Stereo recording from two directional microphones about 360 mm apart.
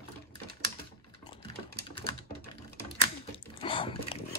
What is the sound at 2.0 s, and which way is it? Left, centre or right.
Typewriter, centre.